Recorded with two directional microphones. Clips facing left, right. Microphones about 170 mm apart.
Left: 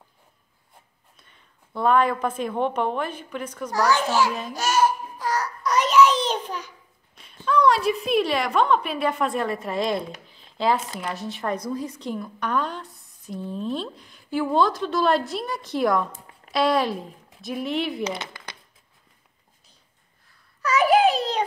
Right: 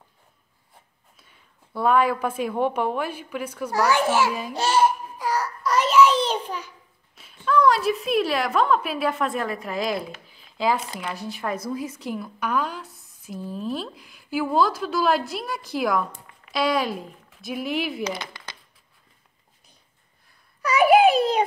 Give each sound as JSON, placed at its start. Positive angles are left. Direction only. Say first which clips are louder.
{"t": 1.1, "sound": "a woman's voice", "louder": "even", "side_deg": -5}
{"t": 4.6, "sound": "a child's voice", "louder": "right 1 dB", "side_deg": -30}
{"t": 5.2, "sound": "child singing", "louder": "right 1 dB", "side_deg": -5}
{"t": 7.2, "sound": "a woman's voice", "louder": "right 1 dB", "side_deg": 0}
{"t": 18.0, "sound": "speech", "louder": "even", "side_deg": 25}
{"t": 20.6, "sound": "a sound", "louder": "right 2 dB", "side_deg": -10}